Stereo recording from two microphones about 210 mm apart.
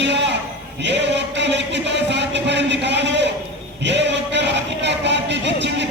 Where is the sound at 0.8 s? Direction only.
55° right (ahead or behind).